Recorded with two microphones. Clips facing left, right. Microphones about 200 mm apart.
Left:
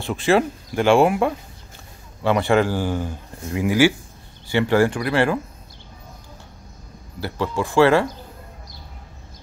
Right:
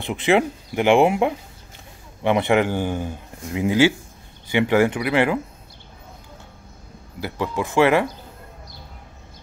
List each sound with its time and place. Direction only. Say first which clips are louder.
0.0 s speech: even; 20° right (ahead or behind)
7.2 s speech: left 1 dB; 15° right (ahead or behind)